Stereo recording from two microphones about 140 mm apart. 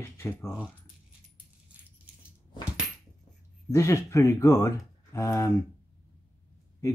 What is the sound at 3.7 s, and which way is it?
Speech, 20° left (ahead or behind).